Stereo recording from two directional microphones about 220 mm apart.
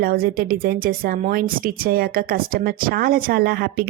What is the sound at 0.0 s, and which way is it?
Speech, 45° right (ahead or behind).